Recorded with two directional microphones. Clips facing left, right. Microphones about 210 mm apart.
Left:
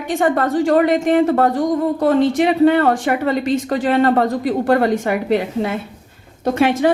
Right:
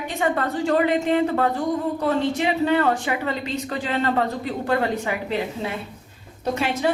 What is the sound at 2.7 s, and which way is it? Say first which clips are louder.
A woman's voice: left 6 dB; 50° left (ahead or behind).